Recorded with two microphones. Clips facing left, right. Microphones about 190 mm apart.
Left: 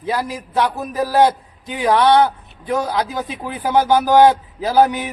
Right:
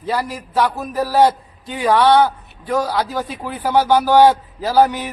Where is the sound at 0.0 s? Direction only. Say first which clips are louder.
Even; 15° left (ahead or behind).